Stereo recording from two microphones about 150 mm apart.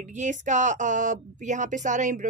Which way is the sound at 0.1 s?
55° right (ahead or behind).